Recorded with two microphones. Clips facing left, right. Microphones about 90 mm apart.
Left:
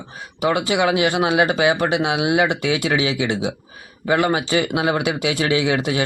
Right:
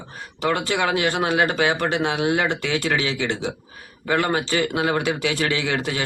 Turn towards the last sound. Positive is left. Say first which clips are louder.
# left 5 dB
turn(degrees=15)  # may be behind; listen again after turning